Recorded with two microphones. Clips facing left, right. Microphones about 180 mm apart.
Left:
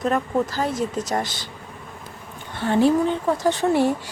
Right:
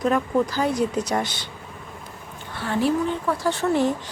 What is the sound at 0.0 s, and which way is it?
Speech, centre (ahead or behind).